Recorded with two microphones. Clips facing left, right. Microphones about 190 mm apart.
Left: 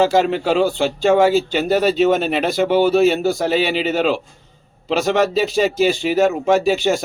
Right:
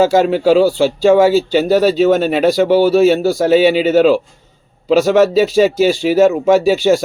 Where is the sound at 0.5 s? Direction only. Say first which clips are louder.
Right 4 dB; 40° right (ahead or behind).